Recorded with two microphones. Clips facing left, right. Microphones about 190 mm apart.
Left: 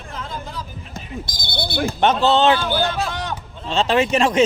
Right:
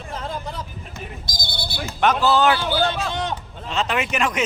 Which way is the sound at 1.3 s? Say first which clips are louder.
Left 5 dB; 60° left (ahead or behind).